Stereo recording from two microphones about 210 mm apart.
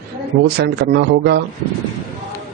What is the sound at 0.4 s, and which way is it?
Speech, 50° right (ahead or behind).